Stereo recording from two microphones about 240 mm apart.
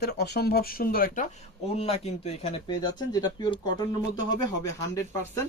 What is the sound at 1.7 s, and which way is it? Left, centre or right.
Speech, left.